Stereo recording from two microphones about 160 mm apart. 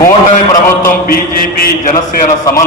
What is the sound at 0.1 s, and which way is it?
Speech, 45° left (ahead or behind).